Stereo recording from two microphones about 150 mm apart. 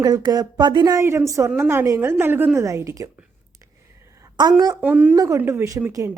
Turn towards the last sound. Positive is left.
turn(degrees=-15)  # may be behind; listen again after turning